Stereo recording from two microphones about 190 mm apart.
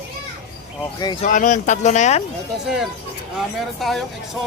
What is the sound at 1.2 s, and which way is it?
Speech, 40° left (ahead or behind).